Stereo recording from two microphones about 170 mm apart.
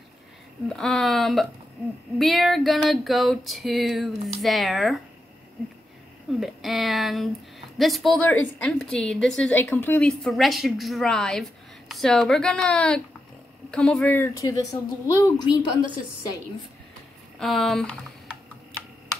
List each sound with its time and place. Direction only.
0.7 s a woman's voice: 5° left (ahead or behind)
6.4 s a woman's voice: centre (ahead or behind); by 16.3 s 25° left (ahead or behind)
17.4 s a woman's voice: centre (ahead or behind)